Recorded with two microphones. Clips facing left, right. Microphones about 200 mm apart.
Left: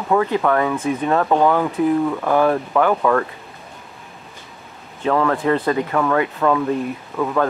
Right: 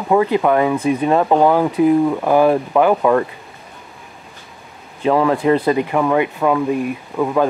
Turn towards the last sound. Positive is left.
turn(degrees=-15)  # may be behind; listen again after turning